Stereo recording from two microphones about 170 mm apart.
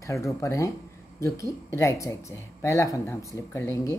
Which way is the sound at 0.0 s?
15° left (ahead or behind).